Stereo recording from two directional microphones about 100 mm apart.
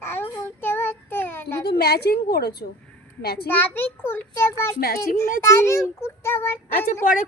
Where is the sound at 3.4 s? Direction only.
20° left (ahead or behind).